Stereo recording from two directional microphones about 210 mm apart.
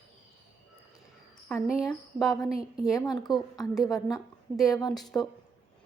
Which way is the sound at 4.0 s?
15° left (ahead or behind).